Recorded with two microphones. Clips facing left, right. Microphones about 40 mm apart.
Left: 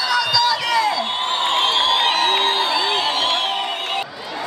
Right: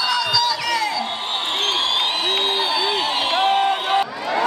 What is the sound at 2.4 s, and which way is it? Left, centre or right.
Crowd, centre.